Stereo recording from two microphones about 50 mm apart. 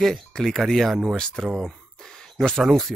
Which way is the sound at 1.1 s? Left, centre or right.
Centre.